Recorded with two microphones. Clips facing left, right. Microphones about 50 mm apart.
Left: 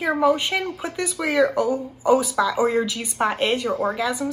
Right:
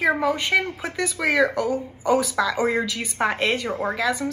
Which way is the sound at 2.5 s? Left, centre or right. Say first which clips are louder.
Left 2 dB; right.